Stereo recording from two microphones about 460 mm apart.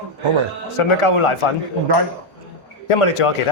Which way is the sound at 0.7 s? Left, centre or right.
Left.